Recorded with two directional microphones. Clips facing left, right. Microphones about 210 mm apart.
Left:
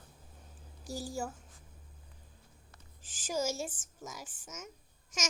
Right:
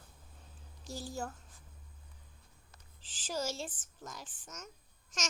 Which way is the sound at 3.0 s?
45° left (ahead or behind).